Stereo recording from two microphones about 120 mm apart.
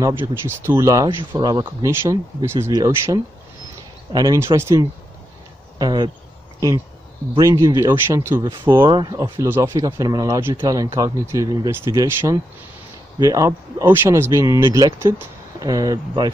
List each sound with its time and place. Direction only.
0.0 s speech: 20° right (ahead or behind); by 1.9 s 35° right (ahead or behind)
1.9 s speech: 20° right (ahead or behind)
5.8 s speech: 35° right (ahead or behind)
7.3 s speech: 25° right (ahead or behind)
8.8 s speech: 35° right (ahead or behind)